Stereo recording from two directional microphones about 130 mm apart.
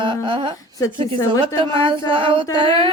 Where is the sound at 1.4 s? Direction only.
45° right (ahead or behind).